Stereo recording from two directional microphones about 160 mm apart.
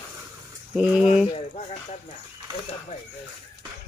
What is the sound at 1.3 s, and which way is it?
Speech, 45° left (ahead or behind).